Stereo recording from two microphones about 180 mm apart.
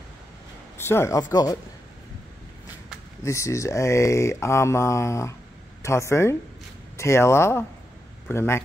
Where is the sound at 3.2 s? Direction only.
15° left (ahead or behind).